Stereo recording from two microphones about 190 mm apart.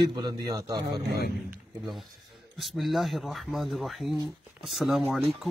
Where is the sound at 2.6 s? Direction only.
Centre (ahead or behind).